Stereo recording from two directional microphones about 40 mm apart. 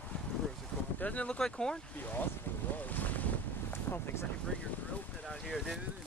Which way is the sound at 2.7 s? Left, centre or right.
Left.